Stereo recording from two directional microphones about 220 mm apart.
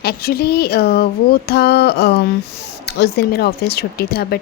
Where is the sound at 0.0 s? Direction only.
45° left (ahead or behind).